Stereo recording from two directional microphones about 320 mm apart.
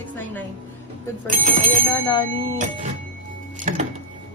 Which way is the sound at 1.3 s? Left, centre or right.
Right.